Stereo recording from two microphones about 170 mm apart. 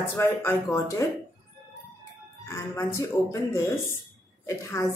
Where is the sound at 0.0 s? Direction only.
15° left (ahead or behind).